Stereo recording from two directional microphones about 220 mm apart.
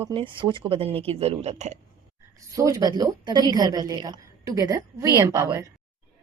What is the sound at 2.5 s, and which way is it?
A woman's voice, 15° right (ahead or behind).